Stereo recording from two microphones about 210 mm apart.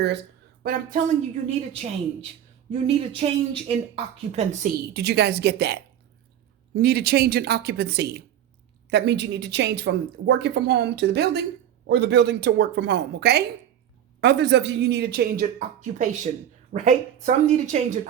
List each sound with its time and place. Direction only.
0.6 s speech: 45° right (ahead or behind)
2.8 s speech: 25° right (ahead or behind)
4.6 s speech: 50° right (ahead or behind); by 18.1 s 35° right (ahead or behind)